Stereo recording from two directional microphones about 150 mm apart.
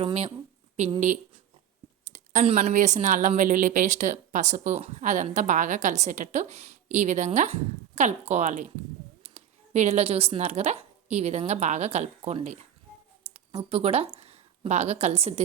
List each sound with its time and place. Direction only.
0.0 s speech: 40° right (ahead or behind)
0.9 s speech: 55° right (ahead or behind)
2.1 s a sound: 55° right (ahead or behind)
2.6 s a woman's voice: 55° right (ahead or behind)